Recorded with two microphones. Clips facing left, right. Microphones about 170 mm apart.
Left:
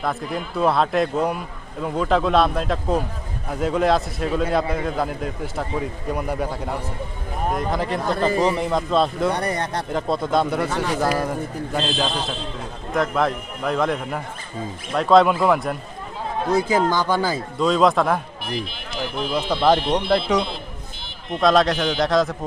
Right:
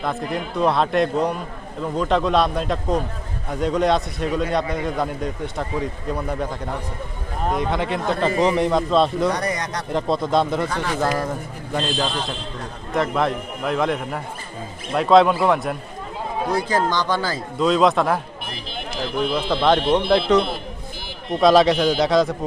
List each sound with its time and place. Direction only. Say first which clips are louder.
0.0 s a man's voice: right 1 dB; centre (ahead or behind)
9.3 s speech: left 1 dB; 30° left (ahead or behind)
9.9 s a man's voice: right 2 dB; centre (ahead or behind)
11.7 s a man's voice: right 1 dB; centre (ahead or behind)
16.9 s speech: left 2 dB; 10° left (ahead or behind)
17.6 s a man's voice: right 1 dB; centre (ahead or behind)
19.3 s a man's voice: left 1 dB; 10° left (ahead or behind)
21.4 s a man's voice: right 3 dB; centre (ahead or behind)